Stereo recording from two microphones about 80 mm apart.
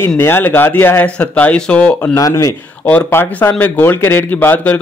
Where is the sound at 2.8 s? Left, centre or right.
Left.